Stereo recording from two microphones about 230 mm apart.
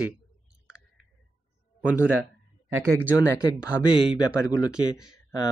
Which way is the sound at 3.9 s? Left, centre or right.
Left.